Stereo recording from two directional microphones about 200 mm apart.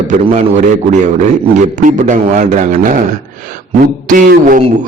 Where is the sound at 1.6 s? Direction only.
40° right (ahead or behind).